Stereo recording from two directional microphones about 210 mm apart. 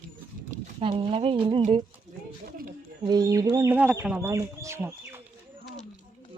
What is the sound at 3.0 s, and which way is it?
Speech, 20° right (ahead or behind).